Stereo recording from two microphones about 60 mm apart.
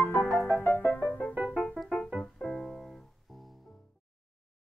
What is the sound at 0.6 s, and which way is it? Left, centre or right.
Music, left.